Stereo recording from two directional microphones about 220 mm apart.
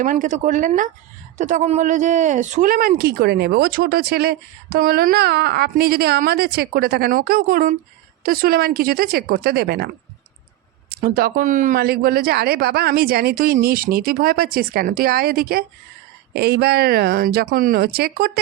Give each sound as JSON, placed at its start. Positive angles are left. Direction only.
{"t": 0.0, "sound": "speech", "side_deg": -35}